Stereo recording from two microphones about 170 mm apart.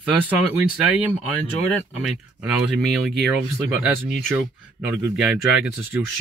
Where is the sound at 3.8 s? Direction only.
5° right (ahead or behind).